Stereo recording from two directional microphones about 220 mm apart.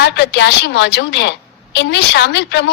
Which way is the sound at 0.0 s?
50° left (ahead or behind).